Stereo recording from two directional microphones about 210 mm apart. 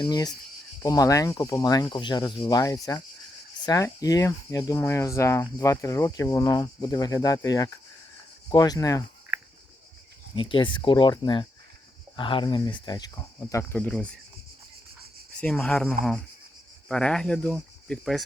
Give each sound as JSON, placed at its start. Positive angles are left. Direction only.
{"t": 0.0, "sound": "speech", "side_deg": 20}
{"t": 10.3, "sound": "speech", "side_deg": 25}
{"t": 15.4, "sound": "speech", "side_deg": 5}